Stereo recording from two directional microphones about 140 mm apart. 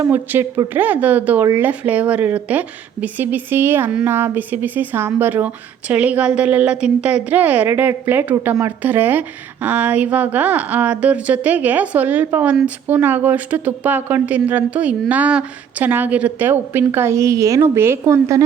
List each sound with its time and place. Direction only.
0.0 s a woman's voice: 15° right (ahead or behind)